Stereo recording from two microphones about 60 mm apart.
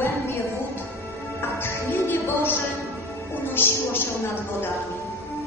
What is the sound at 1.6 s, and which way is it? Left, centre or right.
Music, left.